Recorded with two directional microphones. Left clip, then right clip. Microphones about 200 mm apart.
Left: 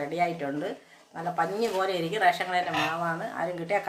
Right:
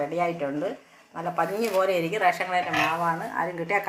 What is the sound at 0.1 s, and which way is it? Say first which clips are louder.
A woman's voice: right 2 dB; 10° left (ahead or behind).